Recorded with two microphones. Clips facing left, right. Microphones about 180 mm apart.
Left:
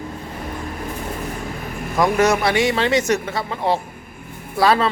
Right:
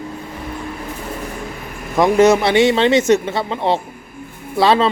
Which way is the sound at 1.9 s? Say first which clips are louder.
Right 5 dB; 25° right (ahead or behind).